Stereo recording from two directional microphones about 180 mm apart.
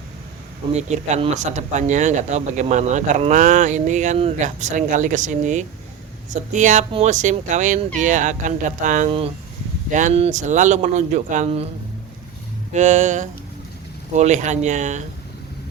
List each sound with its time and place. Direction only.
0.7 s speech: 40° right (ahead or behind)
12.7 s speech: 40° right (ahead or behind)